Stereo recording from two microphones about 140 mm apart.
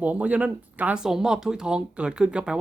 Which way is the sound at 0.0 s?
10° right (ahead or behind).